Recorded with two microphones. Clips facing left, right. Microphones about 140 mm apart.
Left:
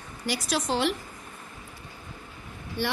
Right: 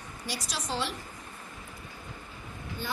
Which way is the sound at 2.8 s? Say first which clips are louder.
Left 7 dB; 80° left.